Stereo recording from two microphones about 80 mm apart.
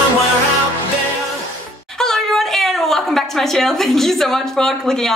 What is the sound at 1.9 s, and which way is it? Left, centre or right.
A woman's voice, centre.